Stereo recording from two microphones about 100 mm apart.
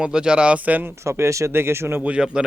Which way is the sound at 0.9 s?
30° right (ahead or behind).